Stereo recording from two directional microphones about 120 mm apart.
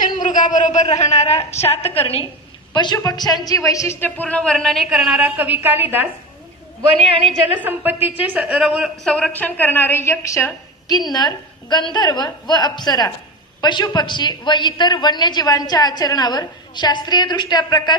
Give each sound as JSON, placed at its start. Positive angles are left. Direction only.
{"t": 0.2, "sound": "a sound", "side_deg": 90}
{"t": 0.9, "sound": "a woman's voice", "side_deg": 70}
{"t": 2.7, "sound": "a woman's voice", "side_deg": 40}
{"t": 7.5, "sound": "a woman's voice", "side_deg": -15}
{"t": 10.9, "sound": "a woman's voice", "side_deg": 35}